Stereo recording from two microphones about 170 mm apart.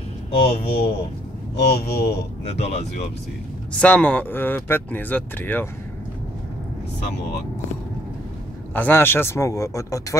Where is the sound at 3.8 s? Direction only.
10° left (ahead or behind).